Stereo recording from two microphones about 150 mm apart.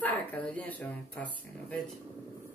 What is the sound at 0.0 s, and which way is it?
Speech, 10° left (ahead or behind).